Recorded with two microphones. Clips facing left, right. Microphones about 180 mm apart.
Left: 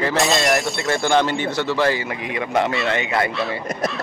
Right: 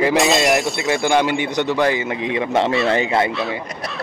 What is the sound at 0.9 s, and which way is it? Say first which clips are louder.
A man's voice: right 1 dB; 15° right (ahead or behind).